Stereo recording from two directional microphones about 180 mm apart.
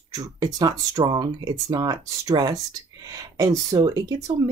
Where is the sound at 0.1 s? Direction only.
20° right (ahead or behind).